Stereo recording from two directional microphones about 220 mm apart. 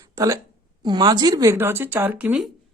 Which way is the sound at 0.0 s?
15° right (ahead or behind).